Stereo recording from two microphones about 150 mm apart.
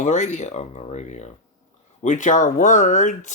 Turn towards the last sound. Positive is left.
turn(degrees=55)  # may be behind; listen again after turning